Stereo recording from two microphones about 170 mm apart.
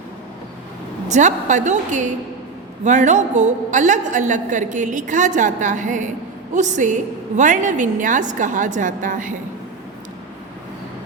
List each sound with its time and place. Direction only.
1.0 s a woman's voice: 45° right (ahead or behind)